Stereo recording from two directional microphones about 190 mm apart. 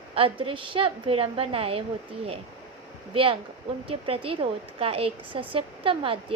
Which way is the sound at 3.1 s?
30° right (ahead or behind).